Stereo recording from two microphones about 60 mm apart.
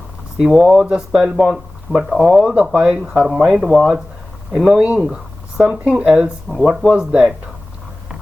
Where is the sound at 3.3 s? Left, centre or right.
Centre.